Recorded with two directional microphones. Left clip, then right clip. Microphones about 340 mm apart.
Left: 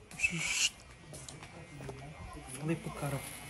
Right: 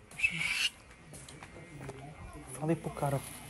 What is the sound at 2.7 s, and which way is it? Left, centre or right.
Speech, centre.